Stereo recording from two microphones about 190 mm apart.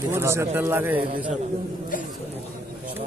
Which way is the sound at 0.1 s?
15° right (ahead or behind).